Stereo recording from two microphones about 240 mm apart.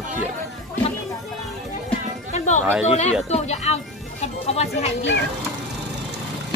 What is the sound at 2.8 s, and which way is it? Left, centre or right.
A child's voice, left.